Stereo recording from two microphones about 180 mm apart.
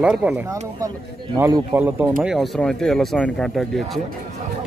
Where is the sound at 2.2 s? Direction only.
Centre (ahead or behind).